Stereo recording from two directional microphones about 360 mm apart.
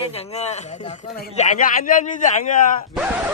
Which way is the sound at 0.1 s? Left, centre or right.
Centre.